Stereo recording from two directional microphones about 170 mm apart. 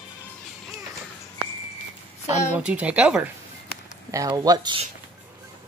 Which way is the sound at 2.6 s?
5° right (ahead or behind).